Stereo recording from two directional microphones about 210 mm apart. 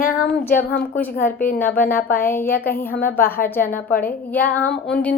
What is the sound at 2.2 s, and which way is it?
A woman's voice, 10° left (ahead or behind).